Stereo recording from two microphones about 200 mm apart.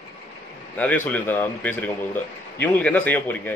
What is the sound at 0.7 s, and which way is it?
A man's voice, 10° left (ahead or behind).